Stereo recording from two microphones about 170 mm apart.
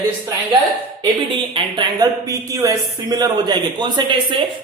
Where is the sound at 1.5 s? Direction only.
25° right (ahead or behind).